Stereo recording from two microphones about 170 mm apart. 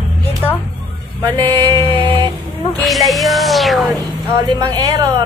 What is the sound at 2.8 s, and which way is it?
Music, centre (ahead or behind).